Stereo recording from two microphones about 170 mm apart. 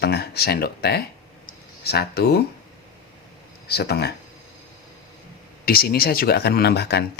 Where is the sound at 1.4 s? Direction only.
70° left (ahead or behind).